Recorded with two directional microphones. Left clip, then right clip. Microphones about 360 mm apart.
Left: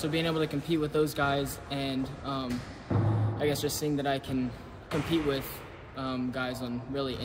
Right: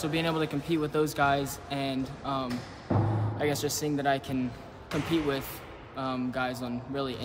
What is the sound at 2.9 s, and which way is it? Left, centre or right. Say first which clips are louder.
Music: right 3 dB; right.